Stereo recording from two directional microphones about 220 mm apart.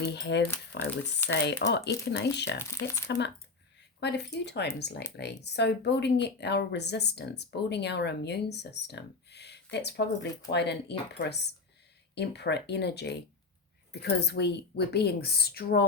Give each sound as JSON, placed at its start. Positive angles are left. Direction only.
{"t": 0.0, "sound": "speech", "side_deg": 50}
{"t": 2.6, "sound": "speech", "side_deg": 10}
{"t": 3.1, "sound": "speech", "side_deg": 50}